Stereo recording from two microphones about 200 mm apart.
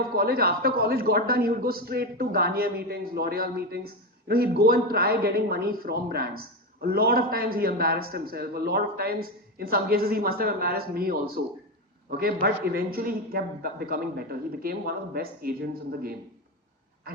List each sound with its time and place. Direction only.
0.2 s a man's voice: 50° right (ahead or behind)